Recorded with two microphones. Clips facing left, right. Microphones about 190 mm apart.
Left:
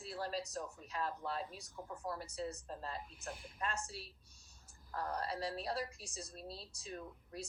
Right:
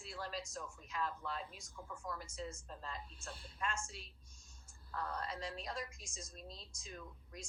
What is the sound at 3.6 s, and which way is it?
A woman's voice, 35° left (ahead or behind).